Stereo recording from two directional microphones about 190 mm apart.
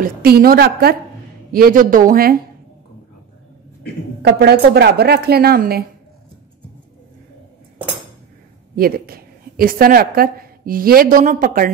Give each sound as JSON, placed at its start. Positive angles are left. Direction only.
{"t": 0.0, "sound": "a woman's voice", "side_deg": -55}
{"t": 4.2, "sound": "a woman's voice", "side_deg": -60}
{"t": 8.7, "sound": "a woman's voice", "side_deg": -50}